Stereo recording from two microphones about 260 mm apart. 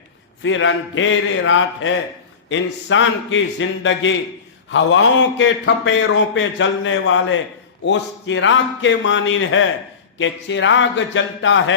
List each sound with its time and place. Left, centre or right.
0.4 s speech: left